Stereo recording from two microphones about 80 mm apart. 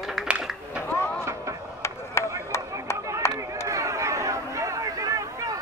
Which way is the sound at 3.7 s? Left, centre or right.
Right.